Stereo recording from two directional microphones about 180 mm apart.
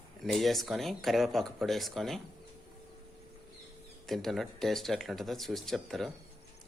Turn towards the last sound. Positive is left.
turn(degrees=0)  # may be behind; listen again after turning